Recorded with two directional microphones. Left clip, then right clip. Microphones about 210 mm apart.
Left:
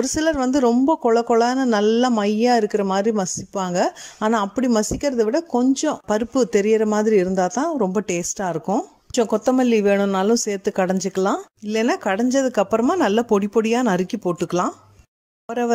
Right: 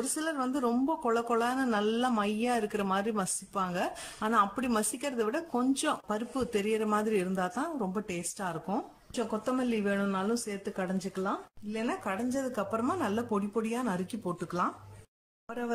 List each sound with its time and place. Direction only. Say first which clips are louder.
0.1 s a woman's voice: left 13 dB; 35° left (ahead or behind)